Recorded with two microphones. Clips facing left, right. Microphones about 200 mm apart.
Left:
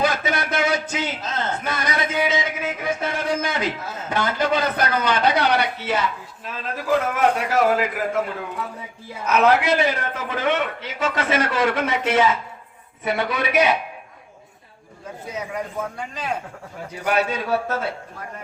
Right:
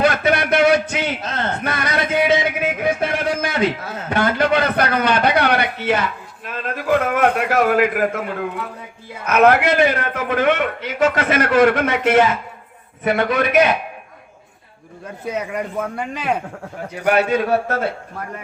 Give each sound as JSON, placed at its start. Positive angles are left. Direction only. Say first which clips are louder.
{"t": 0.0, "sound": "a sound", "louder": "right 5 dB", "side_deg": -60}
{"t": 9.2, "sound": "a man's voice", "louder": "right 4 dB", "side_deg": -55}
{"t": 15.2, "sound": "a man's voice", "louder": "right 5 dB", "side_deg": -65}